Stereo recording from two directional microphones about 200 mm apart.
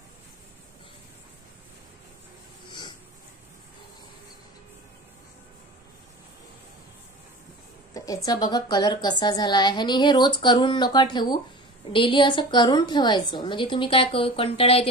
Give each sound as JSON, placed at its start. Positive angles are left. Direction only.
{"t": 7.9, "sound": "speech", "side_deg": 15}